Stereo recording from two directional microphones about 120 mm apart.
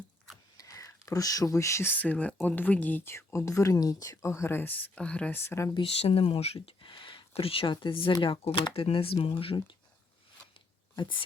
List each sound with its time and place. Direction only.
0.5 s speech: 30° left (ahead or behind)
5.8 s speech: 55° left (ahead or behind)
10.9 s speech: 40° left (ahead or behind)